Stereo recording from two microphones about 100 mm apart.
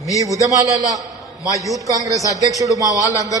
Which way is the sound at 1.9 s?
35° right (ahead or behind).